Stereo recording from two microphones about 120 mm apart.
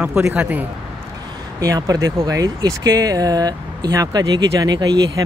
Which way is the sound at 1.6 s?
30° right (ahead or behind).